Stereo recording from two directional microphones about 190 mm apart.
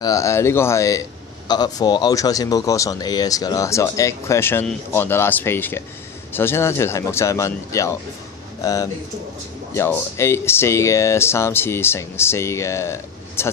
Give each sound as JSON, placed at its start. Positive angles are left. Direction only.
{"t": 0.0, "sound": "speech", "side_deg": 15}